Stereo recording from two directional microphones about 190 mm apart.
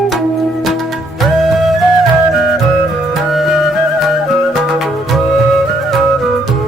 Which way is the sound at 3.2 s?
Centre (ahead or behind).